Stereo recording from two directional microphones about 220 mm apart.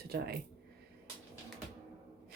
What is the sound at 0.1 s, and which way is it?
Speech, 45° right (ahead or behind).